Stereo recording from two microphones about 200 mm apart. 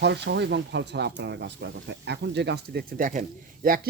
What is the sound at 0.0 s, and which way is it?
Speech, 60° right (ahead or behind).